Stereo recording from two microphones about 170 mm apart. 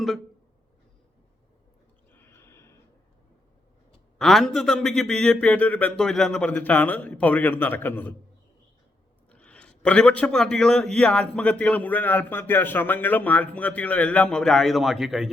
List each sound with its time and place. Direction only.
2.1 s neigh: 15° left (ahead or behind)
4.2 s a man's voice: centre (ahead or behind)
9.3 s a man's voice: 5° left (ahead or behind)